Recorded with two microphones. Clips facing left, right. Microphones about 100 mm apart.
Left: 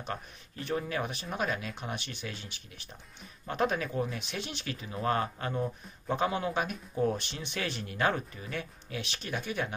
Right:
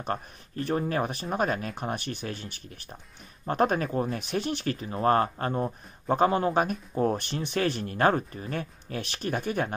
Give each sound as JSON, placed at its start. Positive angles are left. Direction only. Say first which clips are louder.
{"t": 0.0, "sound": "speech", "louder": "right 6 dB", "side_deg": -45}